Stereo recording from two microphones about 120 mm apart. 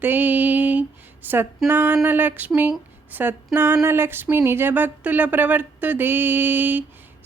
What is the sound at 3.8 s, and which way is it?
Speech, 20° right (ahead or behind).